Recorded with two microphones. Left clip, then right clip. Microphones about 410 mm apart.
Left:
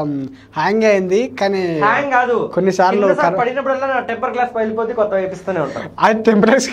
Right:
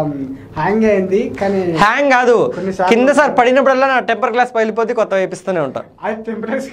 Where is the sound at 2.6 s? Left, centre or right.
Left.